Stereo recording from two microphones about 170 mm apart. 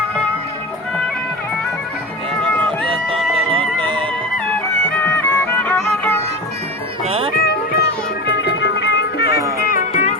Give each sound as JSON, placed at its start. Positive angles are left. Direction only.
{"t": 3.3, "sound": "music", "side_deg": -30}
{"t": 4.9, "sound": "music", "side_deg": 10}
{"t": 7.0, "sound": "cat", "side_deg": -35}
{"t": 7.3, "sound": "music", "side_deg": 65}
{"t": 8.3, "sound": "music", "side_deg": 85}
{"t": 9.6, "sound": "music", "side_deg": 60}
{"t": 9.9, "sound": "music", "side_deg": 45}